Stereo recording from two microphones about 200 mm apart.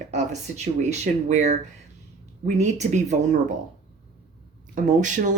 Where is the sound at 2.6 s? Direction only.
35° right (ahead or behind).